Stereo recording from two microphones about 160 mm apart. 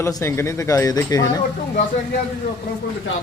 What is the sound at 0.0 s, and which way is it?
Speech, 15° left (ahead or behind).